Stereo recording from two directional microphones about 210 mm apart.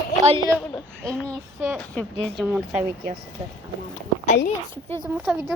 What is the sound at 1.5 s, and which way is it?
Speech, 5° right (ahead or behind).